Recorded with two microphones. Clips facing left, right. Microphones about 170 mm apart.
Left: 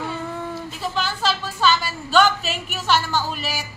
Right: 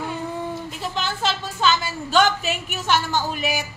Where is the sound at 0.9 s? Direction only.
20° right (ahead or behind).